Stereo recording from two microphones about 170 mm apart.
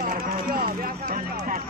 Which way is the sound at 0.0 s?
55° right (ahead or behind).